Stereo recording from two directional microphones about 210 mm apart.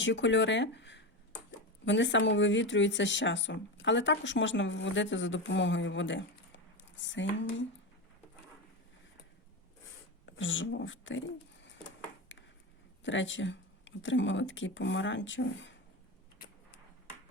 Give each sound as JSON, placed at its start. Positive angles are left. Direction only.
{"t": 0.0, "sound": "speech", "side_deg": 60}
{"t": 10.2, "sound": "speech", "side_deg": 65}
{"t": 12.3, "sound": "a sound", "side_deg": 60}
{"t": 13.0, "sound": "speech", "side_deg": 60}